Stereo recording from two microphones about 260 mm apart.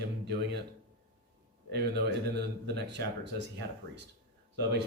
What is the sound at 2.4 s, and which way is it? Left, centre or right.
Speech, right.